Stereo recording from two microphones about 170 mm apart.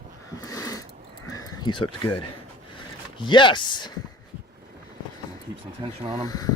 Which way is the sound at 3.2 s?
30° left (ahead or behind).